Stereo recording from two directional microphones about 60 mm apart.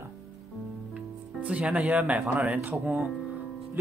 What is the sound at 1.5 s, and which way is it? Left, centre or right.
Speech, right.